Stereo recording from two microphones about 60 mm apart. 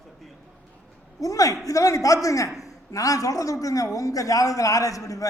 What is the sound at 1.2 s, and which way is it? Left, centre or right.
A woman's voice, left.